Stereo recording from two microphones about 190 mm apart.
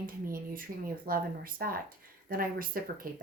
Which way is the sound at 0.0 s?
50° right (ahead or behind).